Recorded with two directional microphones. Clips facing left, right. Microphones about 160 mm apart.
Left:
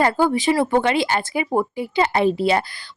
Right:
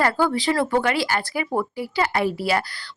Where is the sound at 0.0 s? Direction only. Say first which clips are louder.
Left 3 dB; 20° left (ahead or behind).